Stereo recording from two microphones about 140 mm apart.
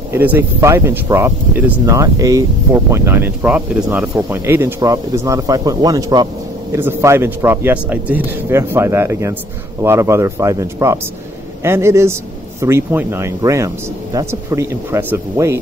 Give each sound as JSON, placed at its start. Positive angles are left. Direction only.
{"t": 0.1, "sound": "speech", "side_deg": -15}